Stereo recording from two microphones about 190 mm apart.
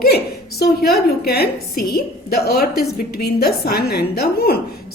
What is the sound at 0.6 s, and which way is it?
A woman's voice, 55° left (ahead or behind).